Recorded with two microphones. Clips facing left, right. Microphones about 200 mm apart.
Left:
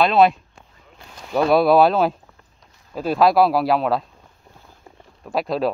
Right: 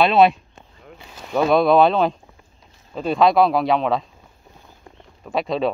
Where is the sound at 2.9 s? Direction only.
5° left (ahead or behind).